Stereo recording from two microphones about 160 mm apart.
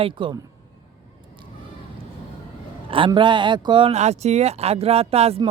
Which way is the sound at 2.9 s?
30° right (ahead or behind).